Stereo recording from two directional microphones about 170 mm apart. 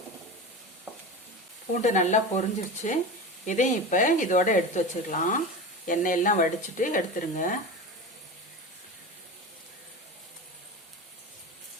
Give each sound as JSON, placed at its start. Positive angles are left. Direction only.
{"t": 0.9, "sound": "stir", "side_deg": -10}
{"t": 1.7, "sound": "speech", "side_deg": 45}